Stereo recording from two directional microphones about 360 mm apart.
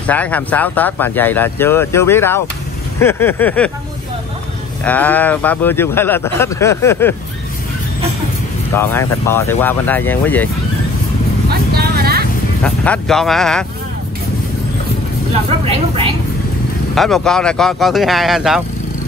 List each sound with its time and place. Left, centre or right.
0.0 s speech: centre
4.8 s speech: centre
8.7 s speech: centre
11.7 s vehicle: right
12.6 s speech: centre
16.9 s speech: centre